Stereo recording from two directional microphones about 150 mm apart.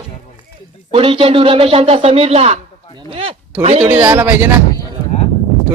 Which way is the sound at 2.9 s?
35° right (ahead or behind).